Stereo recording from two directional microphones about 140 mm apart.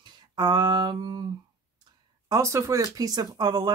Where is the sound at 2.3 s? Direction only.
20° right (ahead or behind).